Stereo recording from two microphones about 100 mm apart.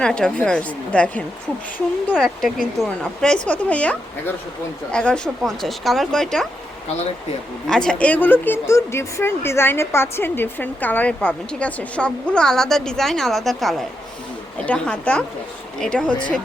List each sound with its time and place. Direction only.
0.0 s speech: 10° left (ahead or behind)
2.1 s speech: centre (ahead or behind)
7.7 s speech: 5° left (ahead or behind)
14.6 s speech: 10° left (ahead or behind)